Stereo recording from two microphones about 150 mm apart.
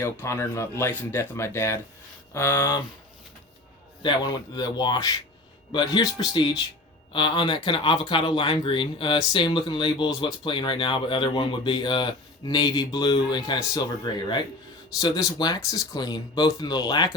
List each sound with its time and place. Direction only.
0.0 s speech: 20° left (ahead or behind)
4.0 s speech: 25° left (ahead or behind)